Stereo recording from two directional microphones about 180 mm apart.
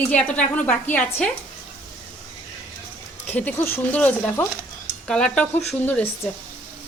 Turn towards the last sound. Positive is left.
turn(degrees=10)  # may be behind; listen again after turning